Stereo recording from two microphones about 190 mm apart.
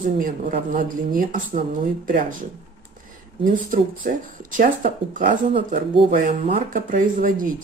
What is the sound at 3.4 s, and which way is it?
Speech, 45° right (ahead or behind).